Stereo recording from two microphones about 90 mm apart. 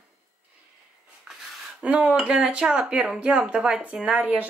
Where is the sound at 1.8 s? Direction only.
15° right (ahead or behind).